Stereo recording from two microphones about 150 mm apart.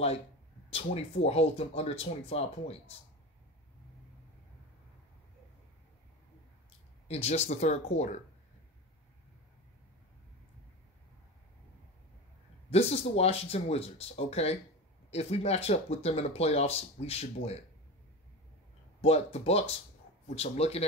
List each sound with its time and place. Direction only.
0.7 s speech: 45° left (ahead or behind)
7.1 s speech: 45° left (ahead or behind)
12.6 s speech: 40° left (ahead or behind)
18.9 s speech: 45° left (ahead or behind)